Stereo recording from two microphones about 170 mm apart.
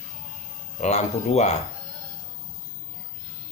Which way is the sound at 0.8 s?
45° left (ahead or behind).